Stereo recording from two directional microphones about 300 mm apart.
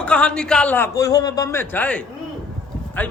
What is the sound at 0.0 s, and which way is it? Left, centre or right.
A man's voice, centre.